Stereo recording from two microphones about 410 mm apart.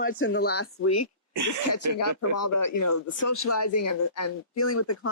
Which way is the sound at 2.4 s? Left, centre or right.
Left.